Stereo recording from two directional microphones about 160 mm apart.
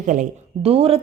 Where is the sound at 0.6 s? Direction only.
40° right (ahead or behind).